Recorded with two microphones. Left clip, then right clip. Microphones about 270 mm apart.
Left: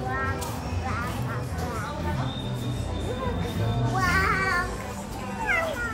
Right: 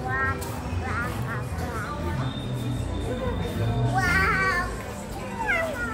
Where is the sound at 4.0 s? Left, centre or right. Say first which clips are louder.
Right 1 dB; left.